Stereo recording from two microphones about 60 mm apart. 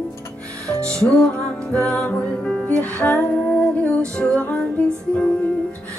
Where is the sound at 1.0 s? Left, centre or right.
Centre.